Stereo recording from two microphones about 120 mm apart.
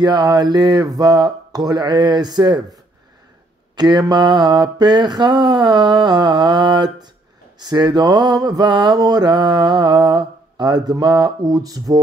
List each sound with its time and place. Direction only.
0.0 s mantra: 35° right (ahead or behind)